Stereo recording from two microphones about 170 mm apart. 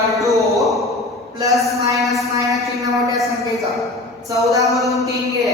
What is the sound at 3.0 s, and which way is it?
Speech, 20° right (ahead or behind).